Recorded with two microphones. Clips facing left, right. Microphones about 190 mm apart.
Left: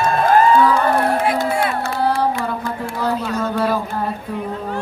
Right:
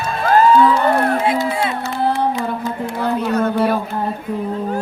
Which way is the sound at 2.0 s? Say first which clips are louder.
Right 1 dB; 20° right (ahead or behind).